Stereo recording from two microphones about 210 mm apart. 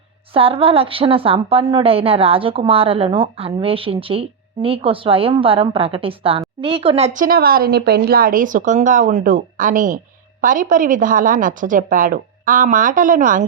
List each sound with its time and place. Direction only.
0.3 s a woman's voice: 25° right (ahead or behind)